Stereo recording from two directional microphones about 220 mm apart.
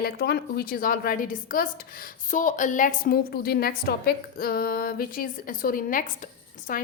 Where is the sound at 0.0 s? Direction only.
45° left (ahead or behind).